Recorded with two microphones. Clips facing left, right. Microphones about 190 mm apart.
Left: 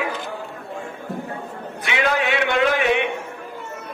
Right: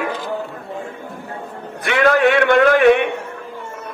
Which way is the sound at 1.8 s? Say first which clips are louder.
Right 8 dB; 50° right (ahead or behind).